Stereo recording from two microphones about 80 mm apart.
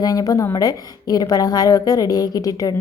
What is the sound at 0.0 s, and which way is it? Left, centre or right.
A woman's voice, left.